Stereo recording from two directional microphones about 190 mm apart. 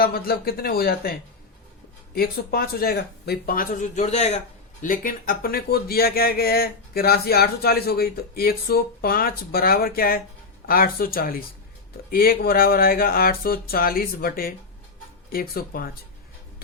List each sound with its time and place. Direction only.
0.0 s speech: 50° left (ahead or behind)
2.1 s speech: 55° left (ahead or behind); by 4.4 s 35° left (ahead or behind)
4.8 s speech: 45° left (ahead or behind)